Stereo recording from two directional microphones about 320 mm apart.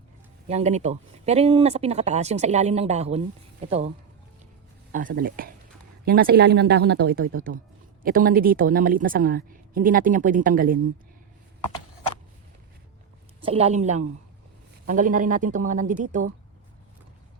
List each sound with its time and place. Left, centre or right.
0.4 s speech: right
13.4 s speech: centre